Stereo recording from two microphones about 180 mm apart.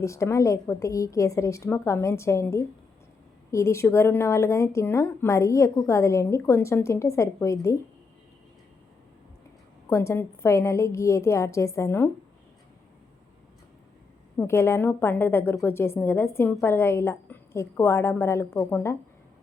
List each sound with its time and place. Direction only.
0.0 s a woman's voice: 15° left (ahead or behind)
9.9 s a woman's voice: 15° left (ahead or behind)
14.3 s a woman's voice: 15° left (ahead or behind)